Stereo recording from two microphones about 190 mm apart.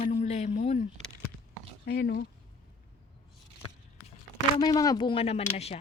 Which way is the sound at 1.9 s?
60° left (ahead or behind).